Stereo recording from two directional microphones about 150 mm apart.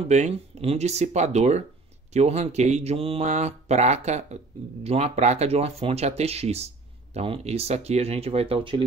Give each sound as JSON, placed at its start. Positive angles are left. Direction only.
{"t": 0.0, "sound": "speech", "side_deg": -45}